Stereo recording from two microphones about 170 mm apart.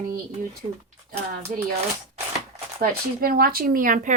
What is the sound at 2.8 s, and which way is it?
Speech, 60° right (ahead or behind).